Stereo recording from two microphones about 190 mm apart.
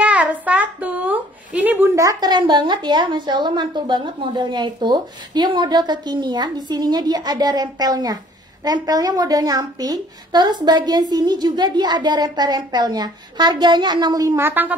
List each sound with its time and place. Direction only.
0.0 s a woman's voice: 5° right (ahead or behind)